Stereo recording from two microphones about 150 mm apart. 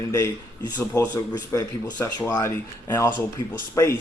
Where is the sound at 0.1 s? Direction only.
20° left (ahead or behind).